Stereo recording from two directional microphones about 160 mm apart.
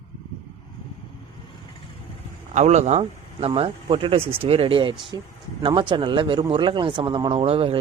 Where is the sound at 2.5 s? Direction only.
45° right (ahead or behind).